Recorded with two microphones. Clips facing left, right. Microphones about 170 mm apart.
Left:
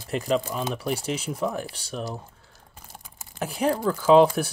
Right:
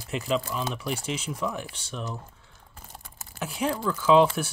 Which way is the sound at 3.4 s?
40° left (ahead or behind).